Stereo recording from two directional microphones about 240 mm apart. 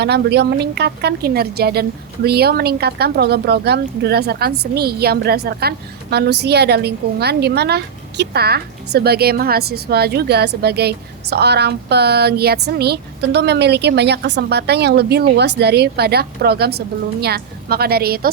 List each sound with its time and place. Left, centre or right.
0.0 s a woman's voice: right